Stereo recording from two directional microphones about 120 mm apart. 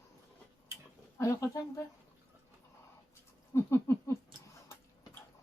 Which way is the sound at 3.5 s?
20° left (ahead or behind).